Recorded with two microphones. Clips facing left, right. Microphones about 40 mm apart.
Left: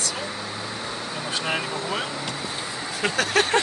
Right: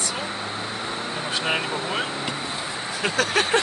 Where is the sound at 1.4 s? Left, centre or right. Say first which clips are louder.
Right 2 dB; right.